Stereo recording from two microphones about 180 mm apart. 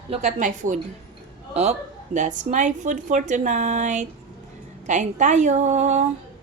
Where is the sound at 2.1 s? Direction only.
40° right (ahead or behind).